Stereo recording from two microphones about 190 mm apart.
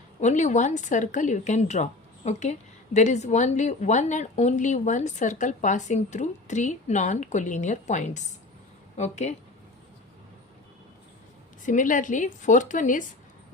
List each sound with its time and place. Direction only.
0.2 s a woman's voice: 40° left (ahead or behind)
11.6 s a woman's voice: 45° left (ahead or behind)